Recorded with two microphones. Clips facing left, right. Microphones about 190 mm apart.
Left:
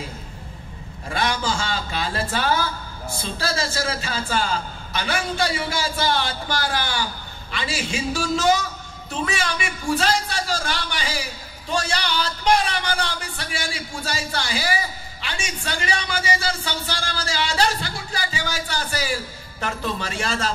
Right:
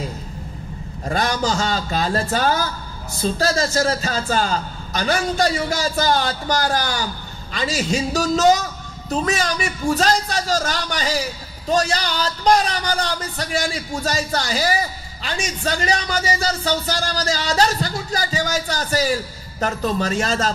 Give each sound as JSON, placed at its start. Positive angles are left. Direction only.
{"t": 1.0, "sound": "a man's voice", "side_deg": -40}